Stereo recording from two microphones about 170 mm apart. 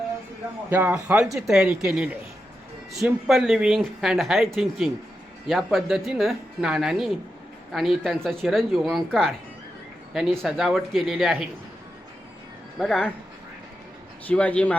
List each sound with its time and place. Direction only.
0.7 s speech: 15° right (ahead or behind)
12.8 s speech: 5° left (ahead or behind)
14.3 s a man's voice: 10° left (ahead or behind)